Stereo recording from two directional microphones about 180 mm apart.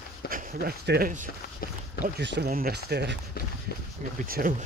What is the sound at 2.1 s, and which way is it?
Speech, 70° right (ahead or behind).